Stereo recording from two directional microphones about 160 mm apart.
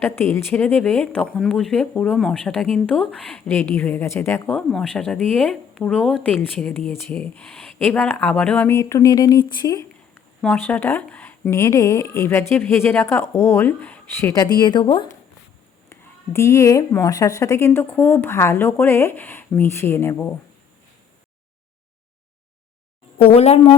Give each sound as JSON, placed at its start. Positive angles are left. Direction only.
{"t": 0.0, "sound": "a woman's voice", "side_deg": 15}
{"t": 10.4, "sound": "a woman's voice", "side_deg": 10}
{"t": 15.9, "sound": "a woman's voice", "side_deg": 15}
{"t": 23.1, "sound": "a woman's voice", "side_deg": 40}